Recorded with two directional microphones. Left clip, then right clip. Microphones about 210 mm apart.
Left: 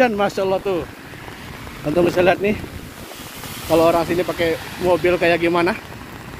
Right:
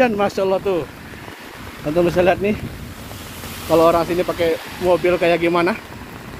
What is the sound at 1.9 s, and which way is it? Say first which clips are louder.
Speech: even; 15° left (ahead or behind).